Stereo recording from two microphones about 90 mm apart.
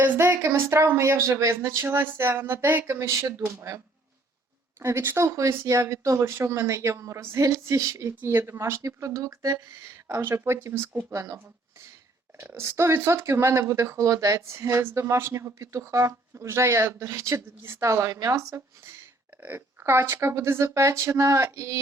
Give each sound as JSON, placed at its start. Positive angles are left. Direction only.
{"t": 0.0, "sound": "speech", "side_deg": -25}
{"t": 4.8, "sound": "speech", "side_deg": -30}
{"t": 12.4, "sound": "speech", "side_deg": -25}
{"t": 19.4, "sound": "speech", "side_deg": -20}